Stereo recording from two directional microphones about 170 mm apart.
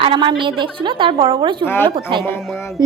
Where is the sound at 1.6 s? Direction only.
15° left (ahead or behind).